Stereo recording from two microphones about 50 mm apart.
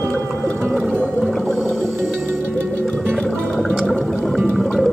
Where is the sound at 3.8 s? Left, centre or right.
Centre.